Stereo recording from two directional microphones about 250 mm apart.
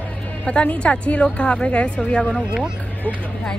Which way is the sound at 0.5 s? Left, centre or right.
Centre.